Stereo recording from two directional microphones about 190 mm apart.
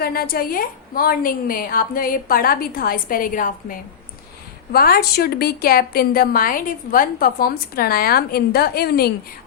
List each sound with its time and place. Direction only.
0.0 s a woman's voice: 55° left (ahead or behind)